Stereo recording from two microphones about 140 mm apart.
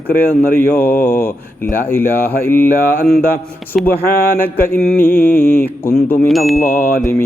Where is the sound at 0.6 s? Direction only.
15° left (ahead or behind).